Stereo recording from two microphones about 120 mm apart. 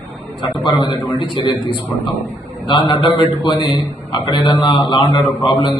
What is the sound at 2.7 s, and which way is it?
A man's voice, 40° left (ahead or behind).